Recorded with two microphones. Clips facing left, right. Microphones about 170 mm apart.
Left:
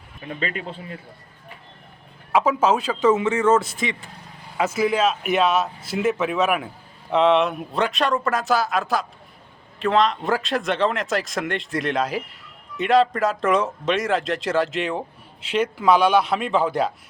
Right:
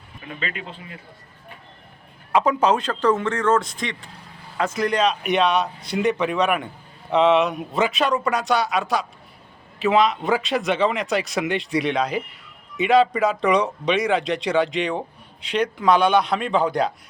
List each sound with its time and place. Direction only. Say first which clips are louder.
0.3 s speech: left 3 dB; 40° left (ahead or behind)
2.3 s speech: even; 5° left (ahead or behind)